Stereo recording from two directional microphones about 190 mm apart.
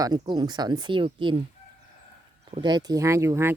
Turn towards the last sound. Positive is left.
turn(degrees=-15)  # may be behind; listen again after turning